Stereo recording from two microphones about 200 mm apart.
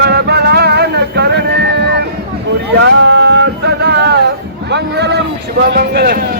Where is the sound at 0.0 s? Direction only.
55° right (ahead or behind).